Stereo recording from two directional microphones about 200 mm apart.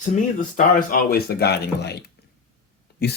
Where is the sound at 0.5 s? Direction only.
45° left (ahead or behind).